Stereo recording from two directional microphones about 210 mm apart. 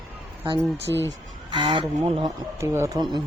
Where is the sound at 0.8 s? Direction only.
55° right (ahead or behind).